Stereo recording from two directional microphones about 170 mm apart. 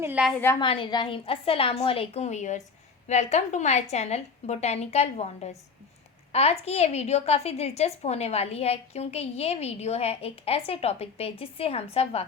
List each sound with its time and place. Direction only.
0.0 s a woman's voice: 10° right (ahead or behind)
0.6 s a woman's voice: 30° left (ahead or behind)